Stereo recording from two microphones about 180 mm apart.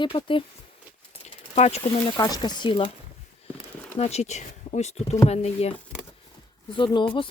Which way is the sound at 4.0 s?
35° left (ahead or behind).